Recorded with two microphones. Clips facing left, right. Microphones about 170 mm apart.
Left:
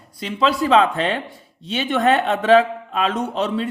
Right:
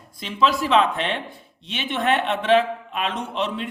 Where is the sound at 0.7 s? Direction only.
35° left (ahead or behind).